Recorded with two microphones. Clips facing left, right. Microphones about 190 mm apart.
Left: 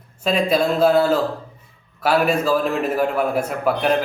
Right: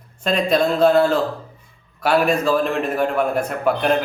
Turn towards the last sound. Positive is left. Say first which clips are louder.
# even
turn(degrees=5)  # may be behind; listen again after turning